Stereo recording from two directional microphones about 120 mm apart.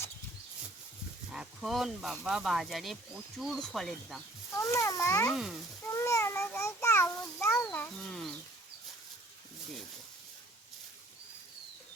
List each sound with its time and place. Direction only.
1.3 s speech: centre (ahead or behind)
4.5 s a child's voice: 25° left (ahead or behind)
5.3 s speech: 5° right (ahead or behind)
5.9 s a child's voice: 25° left (ahead or behind)
7.5 s speech: 10° left (ahead or behind)